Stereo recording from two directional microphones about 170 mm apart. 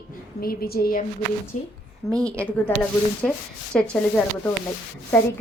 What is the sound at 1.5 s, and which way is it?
Speech, 45° left (ahead or behind).